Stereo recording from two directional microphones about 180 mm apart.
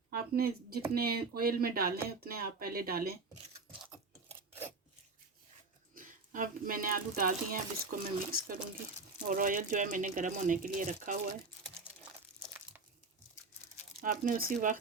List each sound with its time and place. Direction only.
0.1 s speech: 55° right (ahead or behind)
5.9 s speech: 50° right (ahead or behind)
14.0 s speech: 50° right (ahead or behind)